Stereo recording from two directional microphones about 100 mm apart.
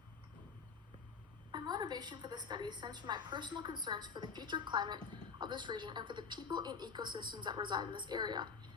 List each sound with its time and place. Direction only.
1.5 s a woman's voice: 45° right (ahead or behind)